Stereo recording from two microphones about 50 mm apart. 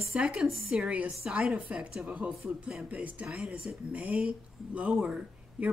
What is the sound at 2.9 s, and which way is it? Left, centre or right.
Speech, right.